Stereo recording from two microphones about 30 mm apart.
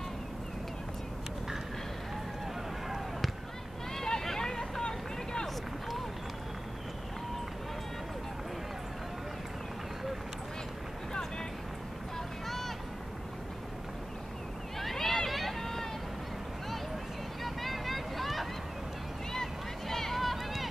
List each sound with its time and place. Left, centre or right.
3.9 s vehicle: centre
12.4 s vehicle: centre
14.8 s a sound: centre
17.4 s vehicle: centre
19.3 s a sound: centre
20.2 s run: centre